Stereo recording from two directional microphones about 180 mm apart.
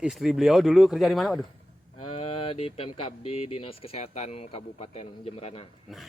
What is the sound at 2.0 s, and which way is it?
Speech, 30° left (ahead or behind).